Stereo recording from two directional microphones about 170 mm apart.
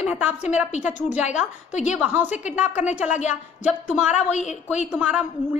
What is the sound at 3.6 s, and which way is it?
Speech, 5° right (ahead or behind).